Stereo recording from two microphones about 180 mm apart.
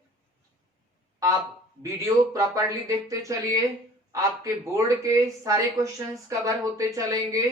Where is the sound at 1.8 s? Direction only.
15° right (ahead or behind).